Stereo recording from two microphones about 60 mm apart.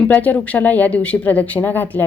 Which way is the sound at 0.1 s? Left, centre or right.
Left.